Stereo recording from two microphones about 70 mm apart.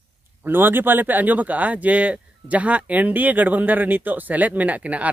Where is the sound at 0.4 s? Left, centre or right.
Right.